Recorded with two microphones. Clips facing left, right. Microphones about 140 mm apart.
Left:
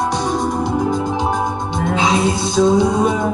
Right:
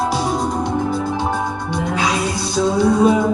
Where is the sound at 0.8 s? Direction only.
15° left (ahead or behind).